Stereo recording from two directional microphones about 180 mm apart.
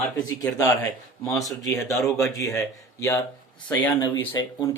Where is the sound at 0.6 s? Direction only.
20° left (ahead or behind).